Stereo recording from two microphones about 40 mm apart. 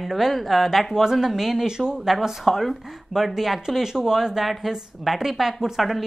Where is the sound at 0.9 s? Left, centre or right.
Centre.